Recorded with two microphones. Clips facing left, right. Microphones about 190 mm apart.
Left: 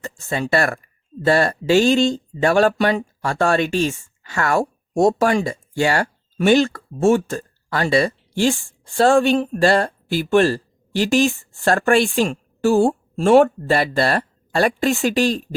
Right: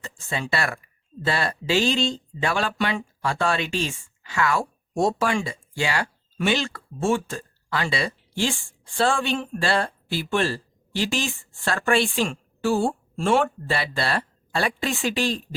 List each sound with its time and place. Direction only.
0.0 s speech: 45° left (ahead or behind)